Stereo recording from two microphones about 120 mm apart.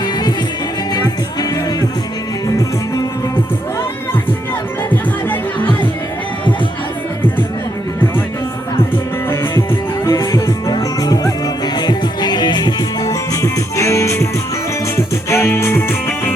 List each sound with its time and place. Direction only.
0.0 s music: 35° left (ahead or behind)
9.3 s music: 25° left (ahead or behind)